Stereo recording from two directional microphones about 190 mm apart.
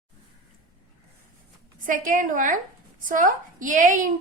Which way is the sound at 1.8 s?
45° right (ahead or behind).